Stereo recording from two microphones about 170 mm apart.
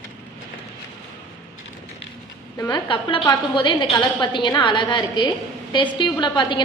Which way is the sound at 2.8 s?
30° left (ahead or behind).